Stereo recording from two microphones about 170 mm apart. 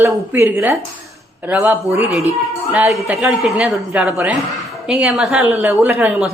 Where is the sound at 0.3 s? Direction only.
15° right (ahead or behind).